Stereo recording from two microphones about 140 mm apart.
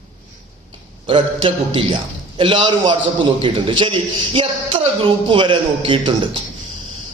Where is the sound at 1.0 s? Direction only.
40° right (ahead or behind).